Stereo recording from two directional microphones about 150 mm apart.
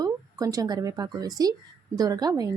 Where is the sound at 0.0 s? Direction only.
25° right (ahead or behind).